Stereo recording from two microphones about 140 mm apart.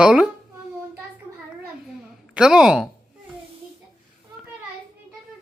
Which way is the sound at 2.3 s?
5° right (ahead or behind).